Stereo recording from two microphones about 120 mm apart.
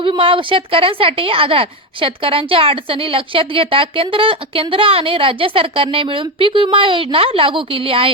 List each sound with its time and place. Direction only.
0.0 s a woman's voice: 45° right (ahead or behind)